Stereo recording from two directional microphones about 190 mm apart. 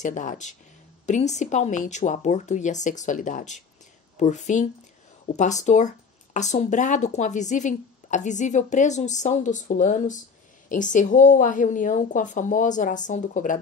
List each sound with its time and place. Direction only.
0.0 s speech: 40° left (ahead or behind)